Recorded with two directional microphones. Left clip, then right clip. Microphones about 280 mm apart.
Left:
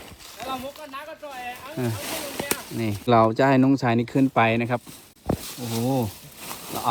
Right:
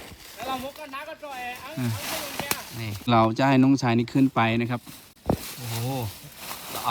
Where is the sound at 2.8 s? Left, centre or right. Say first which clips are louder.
Left 3 dB; centre.